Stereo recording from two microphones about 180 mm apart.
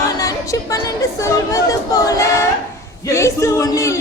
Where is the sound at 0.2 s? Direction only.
20° left (ahead or behind).